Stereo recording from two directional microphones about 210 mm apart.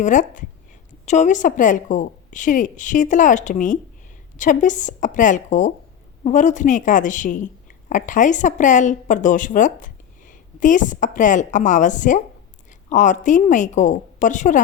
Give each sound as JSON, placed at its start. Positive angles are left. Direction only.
{"t": 0.0, "sound": "a woman's voice", "side_deg": 35}